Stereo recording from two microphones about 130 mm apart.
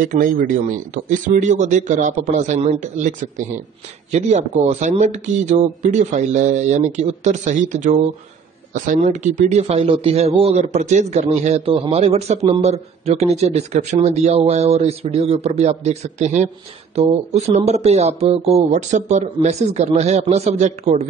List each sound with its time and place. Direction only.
0.0 s a man's voice: 90° right
4.1 s a man's voice: 60° right (ahead or behind)
8.7 s a man's voice: 85° right
9.4 s a man's voice: 60° right (ahead or behind)